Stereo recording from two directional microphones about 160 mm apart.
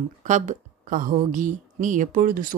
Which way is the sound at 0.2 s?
50° right (ahead or behind).